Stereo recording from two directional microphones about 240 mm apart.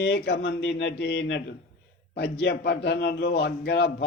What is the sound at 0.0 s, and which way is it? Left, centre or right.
Speech, left.